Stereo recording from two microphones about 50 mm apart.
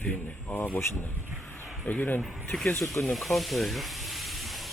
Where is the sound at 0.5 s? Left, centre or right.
Left.